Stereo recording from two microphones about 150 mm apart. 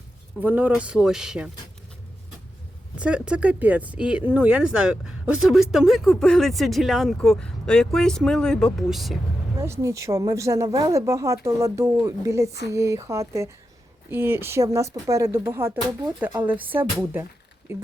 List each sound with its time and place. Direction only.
0.3 s speech: 15° right (ahead or behind)
3.0 s speech: 10° right (ahead or behind)
9.8 s speech: 20° right (ahead or behind)